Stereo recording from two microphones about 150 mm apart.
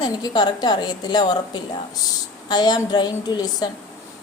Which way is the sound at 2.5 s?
25° left (ahead or behind).